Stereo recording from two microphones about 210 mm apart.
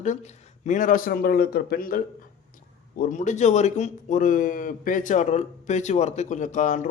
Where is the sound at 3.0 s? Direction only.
35° left (ahead or behind).